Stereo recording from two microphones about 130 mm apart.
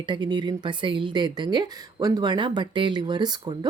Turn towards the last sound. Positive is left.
turn(degrees=-35)  # may be behind; listen again after turning